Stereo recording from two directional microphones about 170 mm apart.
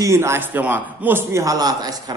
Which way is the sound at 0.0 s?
15° right (ahead or behind).